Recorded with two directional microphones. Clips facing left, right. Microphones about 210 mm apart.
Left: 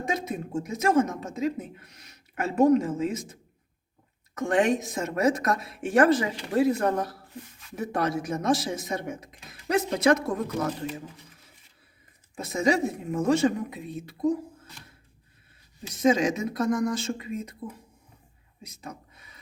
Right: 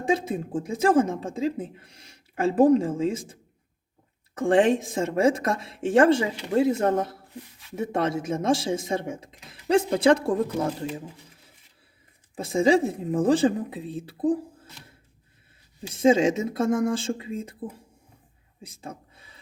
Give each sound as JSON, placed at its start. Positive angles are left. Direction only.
{"t": 0.0, "sound": "speech", "side_deg": -30}
{"t": 4.4, "sound": "speech", "side_deg": -30}
{"t": 7.4, "sound": "speech", "side_deg": 0}
{"t": 7.8, "sound": "speech", "side_deg": -25}
{"t": 12.4, "sound": "speech", "side_deg": -30}
{"t": 15.9, "sound": "speech", "side_deg": -30}
{"t": 18.6, "sound": "a sound", "side_deg": -30}